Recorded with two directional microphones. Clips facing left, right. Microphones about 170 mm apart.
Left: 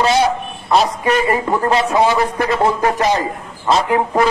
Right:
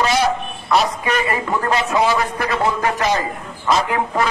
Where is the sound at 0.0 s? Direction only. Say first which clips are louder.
Left 3 dB; 25° left (ahead or behind).